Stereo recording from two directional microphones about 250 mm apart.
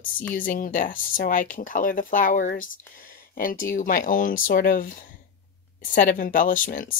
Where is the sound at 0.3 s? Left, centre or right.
Left.